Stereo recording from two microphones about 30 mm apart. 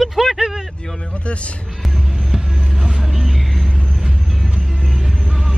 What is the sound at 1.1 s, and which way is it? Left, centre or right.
Speech, left.